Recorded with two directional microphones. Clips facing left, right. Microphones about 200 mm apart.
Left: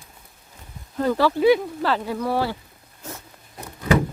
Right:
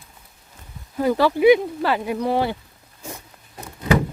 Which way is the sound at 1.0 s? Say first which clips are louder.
Right 2 dB; 15° right (ahead or behind).